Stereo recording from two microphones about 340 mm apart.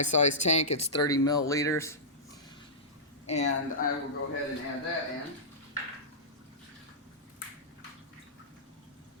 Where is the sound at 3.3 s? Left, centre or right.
Centre.